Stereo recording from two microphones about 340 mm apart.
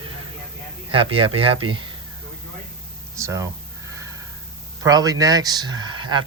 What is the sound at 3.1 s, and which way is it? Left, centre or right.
Speech, centre.